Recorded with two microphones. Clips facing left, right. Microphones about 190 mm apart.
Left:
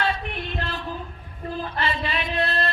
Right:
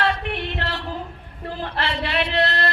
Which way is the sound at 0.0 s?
75° right (ahead or behind).